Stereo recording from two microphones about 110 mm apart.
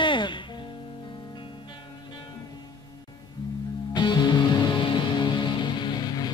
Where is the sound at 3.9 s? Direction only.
40° left (ahead or behind).